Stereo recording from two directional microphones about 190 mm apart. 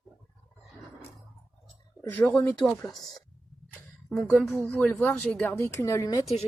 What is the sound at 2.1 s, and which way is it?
Speech, 10° left (ahead or behind).